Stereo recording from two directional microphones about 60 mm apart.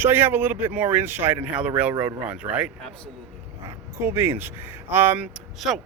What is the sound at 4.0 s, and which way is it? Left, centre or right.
A man's voice, right.